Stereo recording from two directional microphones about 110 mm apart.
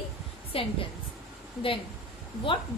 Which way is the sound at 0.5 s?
60° left (ahead or behind).